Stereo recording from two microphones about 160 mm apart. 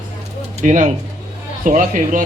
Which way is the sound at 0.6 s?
50° right (ahead or behind).